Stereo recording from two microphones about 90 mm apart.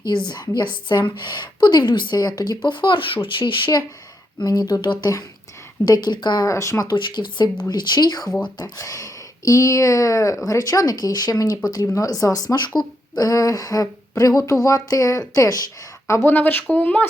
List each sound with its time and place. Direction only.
0.3 s a woman's voice: 50° left (ahead or behind)
2.6 s a woman's voice: 65° left (ahead or behind)
4.4 s speech: 50° left (ahead or behind)
6.5 s a woman's voice: 35° left (ahead or behind)
6.9 s a woman's voice: 60° left (ahead or behind); by 16.3 s 30° left (ahead or behind)
16.3 s speech: 20° left (ahead or behind)